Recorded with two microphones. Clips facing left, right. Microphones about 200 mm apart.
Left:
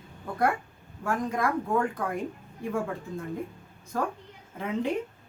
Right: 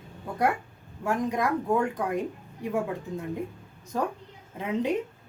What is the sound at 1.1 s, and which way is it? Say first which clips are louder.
A woman's voice: right 2 dB; 20° right (ahead or behind).